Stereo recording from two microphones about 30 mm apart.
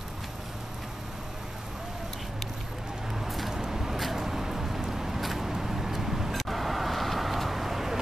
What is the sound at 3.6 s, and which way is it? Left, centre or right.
Vehicle, centre.